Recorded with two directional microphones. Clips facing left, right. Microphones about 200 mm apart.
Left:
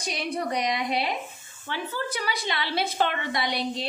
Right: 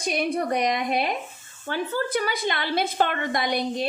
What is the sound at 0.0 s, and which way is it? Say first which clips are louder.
A woman's voice: right 5 dB; 50° right (ahead or behind).